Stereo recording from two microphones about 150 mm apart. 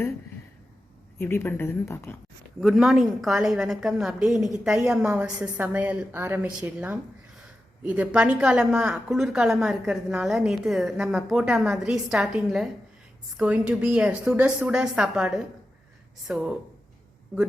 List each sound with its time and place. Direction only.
1.2 s a woman's voice: 15° left (ahead or behind)
2.6 s a woman's voice: centre (ahead or behind)